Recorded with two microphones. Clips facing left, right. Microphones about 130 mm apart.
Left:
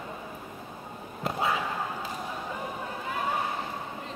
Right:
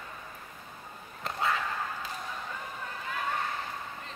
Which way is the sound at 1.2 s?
5° left (ahead or behind).